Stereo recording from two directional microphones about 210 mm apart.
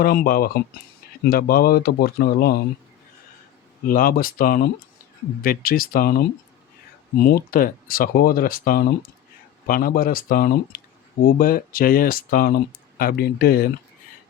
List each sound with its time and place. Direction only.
0.0 s speech: 45° left (ahead or behind)
3.8 s speech: 45° left (ahead or behind)